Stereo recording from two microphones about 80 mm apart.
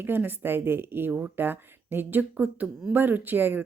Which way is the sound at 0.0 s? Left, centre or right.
Right.